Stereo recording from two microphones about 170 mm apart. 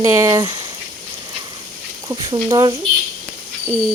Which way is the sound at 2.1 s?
20° right (ahead or behind).